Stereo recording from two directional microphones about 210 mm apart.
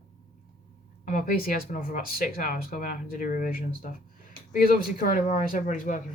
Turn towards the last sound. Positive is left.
turn(degrees=35)  # may be behind; listen again after turning